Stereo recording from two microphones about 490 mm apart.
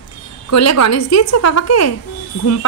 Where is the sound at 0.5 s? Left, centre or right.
Left.